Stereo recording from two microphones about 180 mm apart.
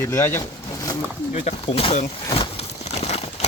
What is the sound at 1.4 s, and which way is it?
Speech, 35° left (ahead or behind).